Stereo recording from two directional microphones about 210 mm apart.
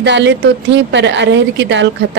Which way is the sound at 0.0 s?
55° right (ahead or behind).